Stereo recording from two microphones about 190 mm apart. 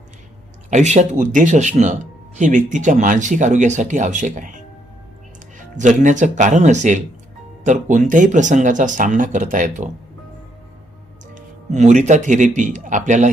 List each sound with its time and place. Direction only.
0.7 s speech: 40° right (ahead or behind)
11.3 s speech: 40° right (ahead or behind)